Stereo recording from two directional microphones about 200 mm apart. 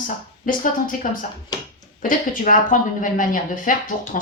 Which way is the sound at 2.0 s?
40° left (ahead or behind).